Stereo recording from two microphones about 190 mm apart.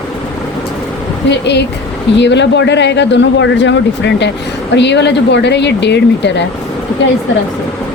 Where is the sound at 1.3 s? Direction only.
65° left (ahead or behind).